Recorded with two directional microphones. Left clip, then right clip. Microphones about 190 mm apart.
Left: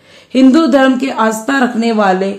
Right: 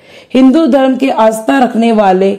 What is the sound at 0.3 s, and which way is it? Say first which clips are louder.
A woman's voice: right 1 dB; 30° right (ahead or behind).